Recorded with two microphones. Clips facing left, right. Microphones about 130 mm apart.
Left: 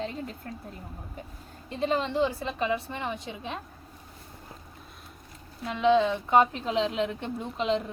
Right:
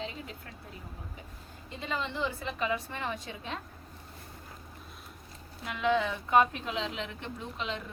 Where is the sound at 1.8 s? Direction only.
35° left (ahead or behind).